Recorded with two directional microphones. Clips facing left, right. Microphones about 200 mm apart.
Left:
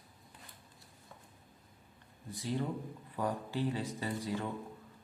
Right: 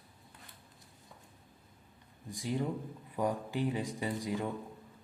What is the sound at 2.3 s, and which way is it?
Speech, 15° right (ahead or behind).